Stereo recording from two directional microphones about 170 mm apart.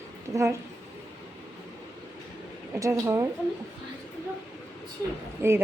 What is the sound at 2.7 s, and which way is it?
Speech, 15° right (ahead or behind).